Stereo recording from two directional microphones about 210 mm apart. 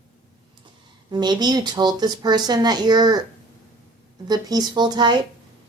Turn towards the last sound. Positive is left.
turn(degrees=-20)  # may be behind; listen again after turning